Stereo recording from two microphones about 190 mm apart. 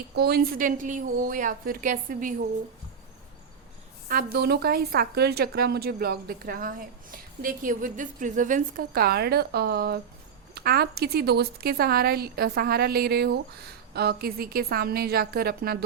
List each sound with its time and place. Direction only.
0.2 s a woman's voice: 55° right (ahead or behind)
4.1 s a woman's voice: 50° right (ahead or behind)